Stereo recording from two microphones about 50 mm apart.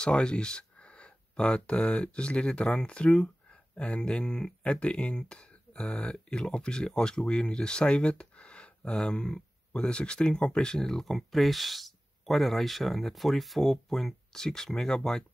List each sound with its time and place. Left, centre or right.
0.0 s speech: centre